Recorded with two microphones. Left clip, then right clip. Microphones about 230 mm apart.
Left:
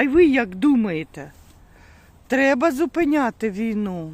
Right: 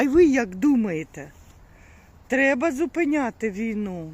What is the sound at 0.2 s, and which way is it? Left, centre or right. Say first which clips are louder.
Speech: left 2 dB; centre.